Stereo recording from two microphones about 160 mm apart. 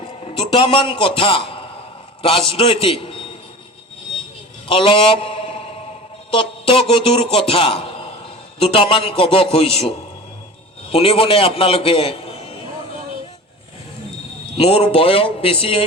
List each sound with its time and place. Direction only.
0.3 s a man's voice: 35° left (ahead or behind)
4.7 s a man's voice: 35° left (ahead or behind)
10.9 s a man's voice: 35° left (ahead or behind)
14.6 s a man's voice: 40° left (ahead or behind)